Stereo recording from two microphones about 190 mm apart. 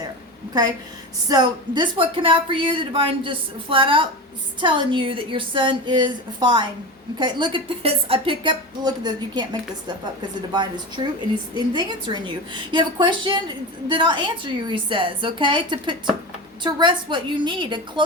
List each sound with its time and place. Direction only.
1.3 s speech: 25° right (ahead or behind)